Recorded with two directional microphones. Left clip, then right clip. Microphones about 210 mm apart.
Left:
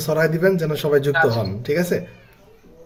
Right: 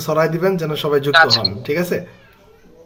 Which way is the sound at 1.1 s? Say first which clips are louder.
Right 6 dB; 50° right (ahead or behind).